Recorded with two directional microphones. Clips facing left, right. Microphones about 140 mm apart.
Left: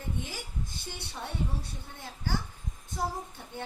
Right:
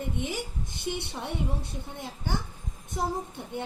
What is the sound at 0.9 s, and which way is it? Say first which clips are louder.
Speech: right 12 dB; 20° right (ahead or behind).